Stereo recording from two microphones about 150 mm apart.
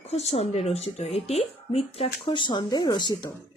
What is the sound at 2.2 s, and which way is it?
Speech, 30° left (ahead or behind).